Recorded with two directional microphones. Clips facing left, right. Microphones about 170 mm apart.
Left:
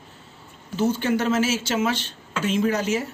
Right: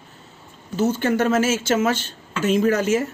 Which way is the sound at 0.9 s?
50° right (ahead or behind).